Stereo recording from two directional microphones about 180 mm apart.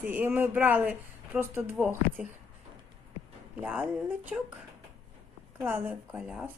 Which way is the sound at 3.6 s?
10° right (ahead or behind).